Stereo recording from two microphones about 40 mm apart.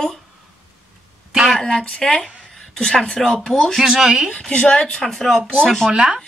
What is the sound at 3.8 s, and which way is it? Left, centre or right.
Speech, centre.